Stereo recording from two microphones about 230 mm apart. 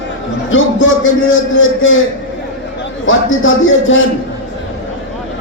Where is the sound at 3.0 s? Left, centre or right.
Left.